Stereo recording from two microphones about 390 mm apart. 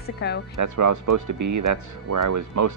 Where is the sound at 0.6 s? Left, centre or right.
Right.